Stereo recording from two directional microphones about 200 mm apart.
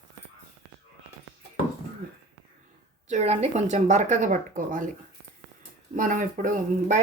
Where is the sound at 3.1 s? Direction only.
30° right (ahead or behind).